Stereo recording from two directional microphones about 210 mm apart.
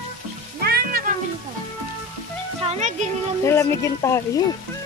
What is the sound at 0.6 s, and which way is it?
Music, 45° right (ahead or behind).